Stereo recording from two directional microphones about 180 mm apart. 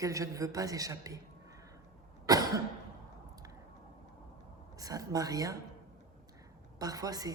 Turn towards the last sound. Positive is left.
turn(degrees=-20)  # may be behind; listen again after turning